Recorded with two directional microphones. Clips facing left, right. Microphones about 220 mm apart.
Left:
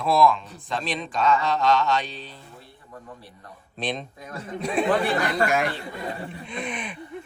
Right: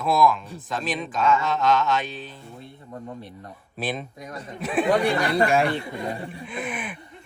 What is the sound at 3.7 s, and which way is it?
Speech, 5° right (ahead or behind).